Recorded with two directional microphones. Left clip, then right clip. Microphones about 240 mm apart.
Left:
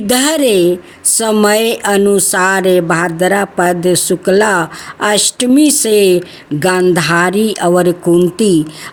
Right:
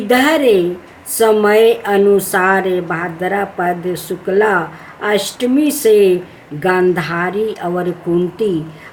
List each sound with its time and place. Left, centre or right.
0.1 s speech: left